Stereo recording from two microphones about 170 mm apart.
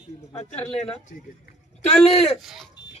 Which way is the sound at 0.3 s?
40° left (ahead or behind).